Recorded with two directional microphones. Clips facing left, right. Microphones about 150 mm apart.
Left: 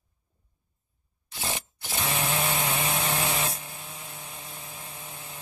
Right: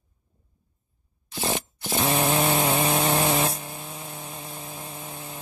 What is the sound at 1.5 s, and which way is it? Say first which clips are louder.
Chainsaw: right 7 dB; 35° right (ahead or behind).